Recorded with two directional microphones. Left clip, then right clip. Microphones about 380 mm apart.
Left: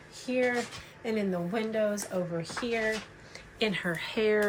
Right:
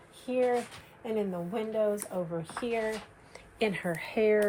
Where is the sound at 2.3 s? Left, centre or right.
Centre.